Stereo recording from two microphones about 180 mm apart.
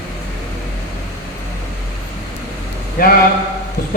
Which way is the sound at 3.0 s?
55° left (ahead or behind).